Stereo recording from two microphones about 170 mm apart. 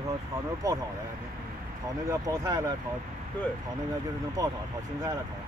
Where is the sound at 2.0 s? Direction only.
20° right (ahead or behind).